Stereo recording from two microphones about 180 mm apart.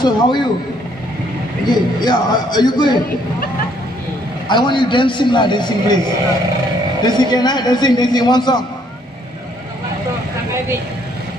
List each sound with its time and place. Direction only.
0.0 s a man's voice: 25° left (ahead or behind)
1.7 s a man's voice: 25° left (ahead or behind)
4.5 s a man's voice: 25° left (ahead or behind)
7.0 s a man's voice: 25° left (ahead or behind)